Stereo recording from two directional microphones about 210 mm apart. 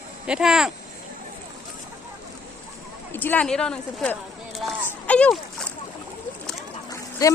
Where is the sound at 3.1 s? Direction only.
10° left (ahead or behind).